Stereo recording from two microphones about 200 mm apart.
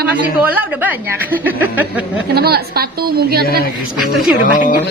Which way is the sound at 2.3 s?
50° right (ahead or behind).